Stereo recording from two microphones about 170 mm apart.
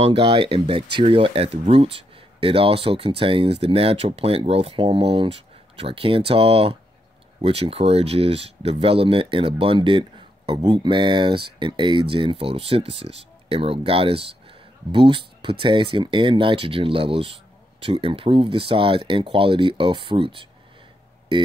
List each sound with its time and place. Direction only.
0.0 s speech: 30° right (ahead or behind)